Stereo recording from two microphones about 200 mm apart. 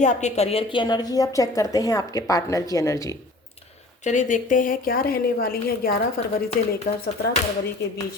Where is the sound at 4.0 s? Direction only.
40° left (ahead or behind).